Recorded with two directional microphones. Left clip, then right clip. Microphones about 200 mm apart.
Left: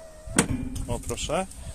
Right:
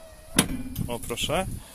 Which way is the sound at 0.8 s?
5° right (ahead or behind).